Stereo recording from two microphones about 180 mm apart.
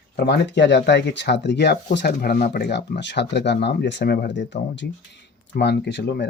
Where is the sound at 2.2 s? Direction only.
55° left (ahead or behind); by 4.4 s 75° left (ahead or behind).